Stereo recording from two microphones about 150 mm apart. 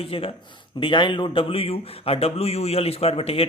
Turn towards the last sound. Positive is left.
turn(degrees=40)  # may be behind; listen again after turning